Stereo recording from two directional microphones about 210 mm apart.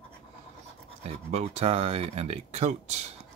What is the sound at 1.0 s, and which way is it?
Speech, 30° right (ahead or behind).